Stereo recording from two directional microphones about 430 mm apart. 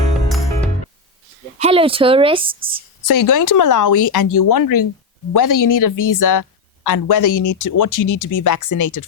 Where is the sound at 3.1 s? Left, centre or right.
Left.